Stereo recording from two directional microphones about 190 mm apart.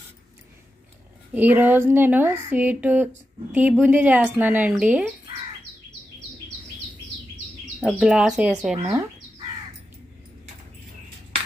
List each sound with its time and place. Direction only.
1.3 s a woman's voice: 10° right (ahead or behind)
7.9 s speech: centre (ahead or behind)
8.8 s a woman's voice: 15° right (ahead or behind)